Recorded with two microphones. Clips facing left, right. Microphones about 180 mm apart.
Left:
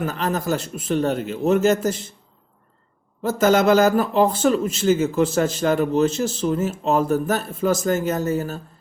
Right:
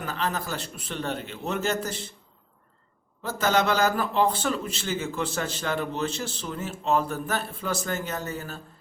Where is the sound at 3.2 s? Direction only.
45° left (ahead or behind).